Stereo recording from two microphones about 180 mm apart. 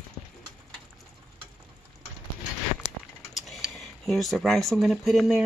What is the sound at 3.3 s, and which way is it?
Speech, centre (ahead or behind).